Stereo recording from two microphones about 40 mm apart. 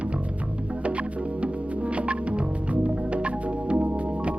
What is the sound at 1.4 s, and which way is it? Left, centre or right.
Music, right.